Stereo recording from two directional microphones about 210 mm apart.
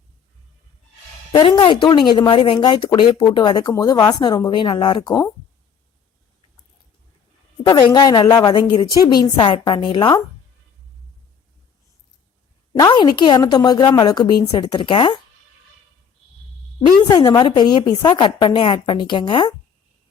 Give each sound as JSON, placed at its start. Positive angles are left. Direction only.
{"t": 1.3, "sound": "speech", "side_deg": 20}
{"t": 7.6, "sound": "speech", "side_deg": 15}
{"t": 12.8, "sound": "speech", "side_deg": 20}
{"t": 17.0, "sound": "speech", "side_deg": 20}